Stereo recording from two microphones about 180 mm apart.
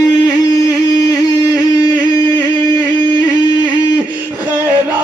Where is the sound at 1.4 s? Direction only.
20° left (ahead or behind).